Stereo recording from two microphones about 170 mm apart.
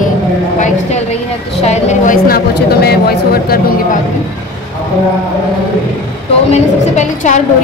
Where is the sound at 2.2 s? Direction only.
65° left (ahead or behind).